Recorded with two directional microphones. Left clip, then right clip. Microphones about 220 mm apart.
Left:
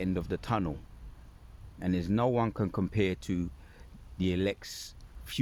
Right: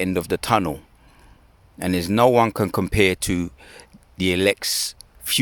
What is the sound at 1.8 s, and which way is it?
Speech, 40° right (ahead or behind).